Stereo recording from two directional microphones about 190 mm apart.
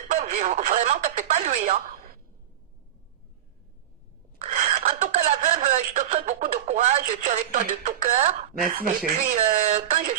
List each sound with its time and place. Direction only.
0.1 s speech: 35° right (ahead or behind)
4.4 s a sound: 35° right (ahead or behind)
8.5 s speech: 45° right (ahead or behind)